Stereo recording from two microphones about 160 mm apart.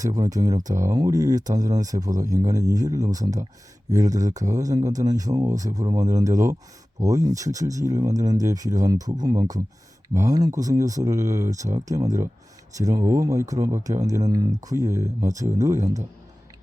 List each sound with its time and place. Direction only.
0.0 s speech: 20° right (ahead or behind)